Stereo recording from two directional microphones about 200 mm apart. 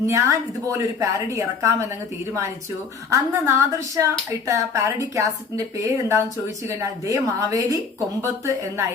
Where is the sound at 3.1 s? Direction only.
15° right (ahead or behind).